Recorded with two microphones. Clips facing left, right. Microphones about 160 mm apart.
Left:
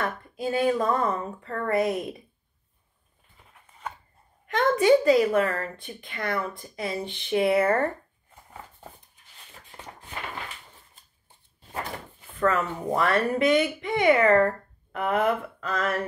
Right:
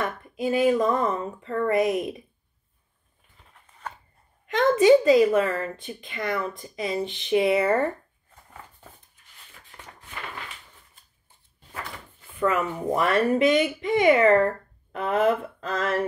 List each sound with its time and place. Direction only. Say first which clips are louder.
0.0 s speech: right 2 dB; 20° right (ahead or behind)
4.5 s speech: right 3 dB; 20° right (ahead or behind)
9.7 s a sound: left 3 dB; 25° left (ahead or behind)
12.4 s speech: even; 10° right (ahead or behind); by 16.0 s 30° right (ahead or behind)